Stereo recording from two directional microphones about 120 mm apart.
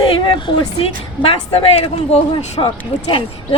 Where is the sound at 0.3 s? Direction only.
40° left (ahead or behind).